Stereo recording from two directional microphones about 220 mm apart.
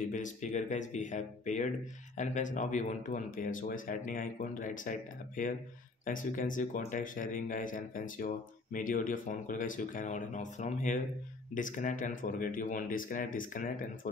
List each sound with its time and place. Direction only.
0.0 s speech: 35° left (ahead or behind)